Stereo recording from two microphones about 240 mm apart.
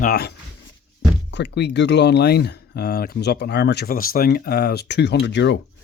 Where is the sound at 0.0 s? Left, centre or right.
Left.